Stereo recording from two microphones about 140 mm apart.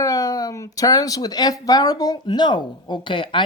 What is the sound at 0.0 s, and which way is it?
Speech, 25° left (ahead or behind).